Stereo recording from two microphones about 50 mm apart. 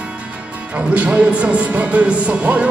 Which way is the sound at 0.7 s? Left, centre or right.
Right.